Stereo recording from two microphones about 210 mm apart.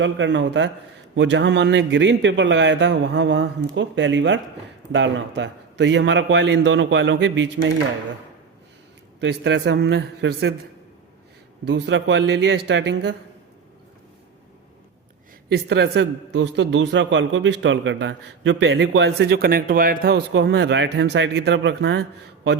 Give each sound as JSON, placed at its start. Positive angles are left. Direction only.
{"t": 0.0, "sound": "a man's voice", "side_deg": -60}
{"t": 9.2, "sound": "a man's voice", "side_deg": -60}
{"t": 11.6, "sound": "a man's voice", "side_deg": -60}
{"t": 15.5, "sound": "a man's voice", "side_deg": -55}